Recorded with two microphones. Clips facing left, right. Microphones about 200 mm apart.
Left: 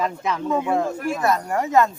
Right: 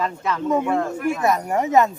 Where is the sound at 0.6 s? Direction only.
10° left (ahead or behind).